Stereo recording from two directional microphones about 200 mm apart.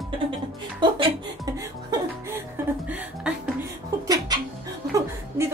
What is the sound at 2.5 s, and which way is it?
Music, 10° right (ahead or behind).